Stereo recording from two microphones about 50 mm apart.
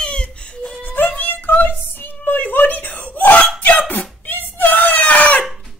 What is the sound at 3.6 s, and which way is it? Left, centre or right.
Dog, left.